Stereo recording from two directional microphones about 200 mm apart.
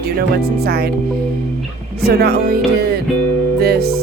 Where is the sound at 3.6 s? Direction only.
50° right (ahead or behind).